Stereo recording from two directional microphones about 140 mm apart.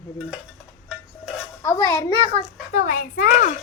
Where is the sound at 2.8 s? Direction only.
70° left (ahead or behind).